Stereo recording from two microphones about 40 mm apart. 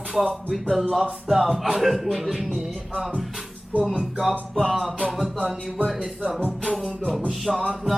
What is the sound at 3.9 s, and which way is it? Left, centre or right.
Music, centre.